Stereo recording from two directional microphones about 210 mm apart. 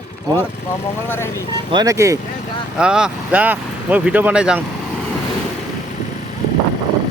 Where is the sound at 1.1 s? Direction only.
10° left (ahead or behind).